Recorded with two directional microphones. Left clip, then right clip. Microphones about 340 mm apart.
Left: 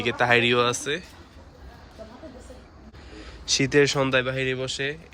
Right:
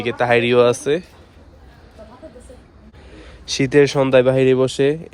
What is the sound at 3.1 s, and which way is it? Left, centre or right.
Speech, centre.